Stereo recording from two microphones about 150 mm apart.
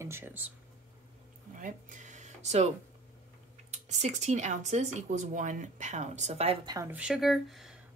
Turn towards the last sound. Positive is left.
turn(degrees=0)  # may be behind; listen again after turning